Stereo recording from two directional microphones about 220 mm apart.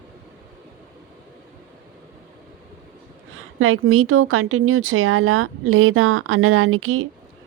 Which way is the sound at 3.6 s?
70° right (ahead or behind).